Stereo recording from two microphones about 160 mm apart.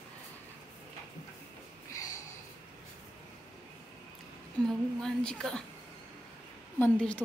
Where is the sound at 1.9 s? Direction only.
20° left (ahead or behind).